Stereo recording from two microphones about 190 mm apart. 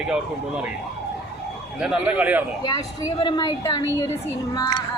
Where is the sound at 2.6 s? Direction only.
20° left (ahead or behind).